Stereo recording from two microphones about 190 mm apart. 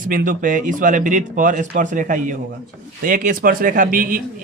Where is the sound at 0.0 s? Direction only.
45° right (ahead or behind).